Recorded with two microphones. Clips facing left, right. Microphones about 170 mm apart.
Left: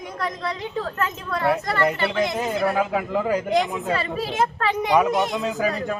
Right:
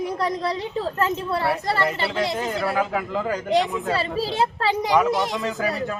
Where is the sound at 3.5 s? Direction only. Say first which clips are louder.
Even; 35° right (ahead or behind).